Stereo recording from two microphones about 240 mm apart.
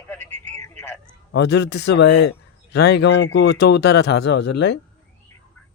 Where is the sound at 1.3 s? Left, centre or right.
Left.